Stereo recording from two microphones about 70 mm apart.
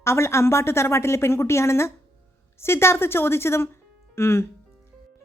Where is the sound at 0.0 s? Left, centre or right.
Left.